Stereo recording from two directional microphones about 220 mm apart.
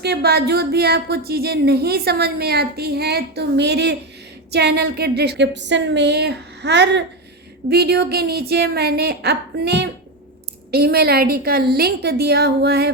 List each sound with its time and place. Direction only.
0.0 s speech: 45° right (ahead or behind)